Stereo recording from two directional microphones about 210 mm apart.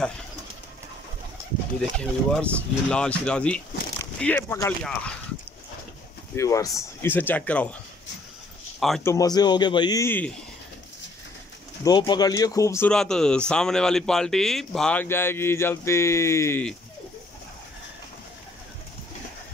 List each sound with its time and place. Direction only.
1.8 s speech: 5° left (ahead or behind)
6.3 s speech: 15° left (ahead or behind)
8.7 s a sound: centre (ahead or behind)
9.0 s speech: 15° left (ahead or behind)
11.8 s speech: 20° left (ahead or behind)